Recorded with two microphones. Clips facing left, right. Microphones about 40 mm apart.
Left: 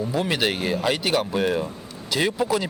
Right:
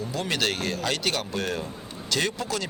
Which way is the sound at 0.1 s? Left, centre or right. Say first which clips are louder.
Left 3 dB; centre.